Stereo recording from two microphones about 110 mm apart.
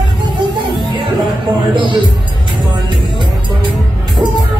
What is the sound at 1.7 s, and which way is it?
Music, 50° right (ahead or behind).